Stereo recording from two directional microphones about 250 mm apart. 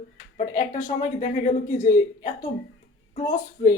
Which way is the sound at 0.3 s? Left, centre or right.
Left.